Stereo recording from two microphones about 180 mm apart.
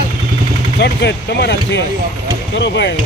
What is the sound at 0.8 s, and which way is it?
Speech, 70° left (ahead or behind).